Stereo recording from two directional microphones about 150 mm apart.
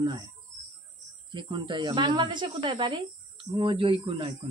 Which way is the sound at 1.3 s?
30° right (ahead or behind).